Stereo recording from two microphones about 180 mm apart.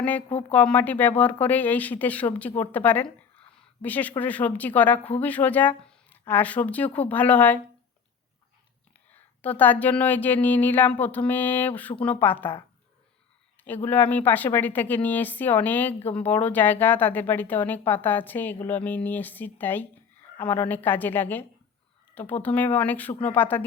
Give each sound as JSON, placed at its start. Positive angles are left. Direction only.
{"t": 0.0, "sound": "a woman's voice", "side_deg": 10}
{"t": 0.3, "sound": "a woman's voice", "side_deg": 30}
{"t": 0.5, "sound": "a woman's voice", "side_deg": 5}
{"t": 9.4, "sound": "a woman's voice", "side_deg": 10}
{"t": 13.7, "sound": "a woman's voice", "side_deg": 10}